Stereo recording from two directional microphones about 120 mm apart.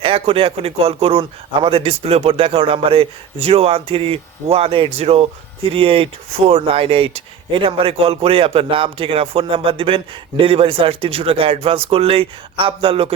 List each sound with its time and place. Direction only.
0.0 s speech: 50° right (ahead or behind)